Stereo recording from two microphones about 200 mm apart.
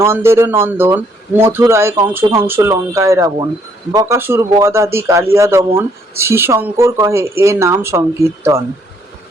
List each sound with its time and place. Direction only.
0.0 s speech: 10° right (ahead or behind)